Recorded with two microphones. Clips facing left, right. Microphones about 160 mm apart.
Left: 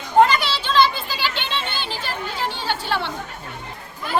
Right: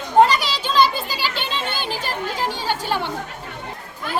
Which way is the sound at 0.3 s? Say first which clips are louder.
Even; 40° right (ahead or behind).